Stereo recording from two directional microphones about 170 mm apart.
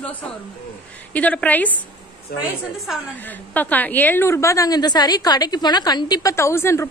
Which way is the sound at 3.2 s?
10° left (ahead or behind).